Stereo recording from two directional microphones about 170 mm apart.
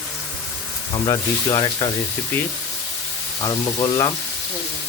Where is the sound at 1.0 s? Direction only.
20° left (ahead or behind).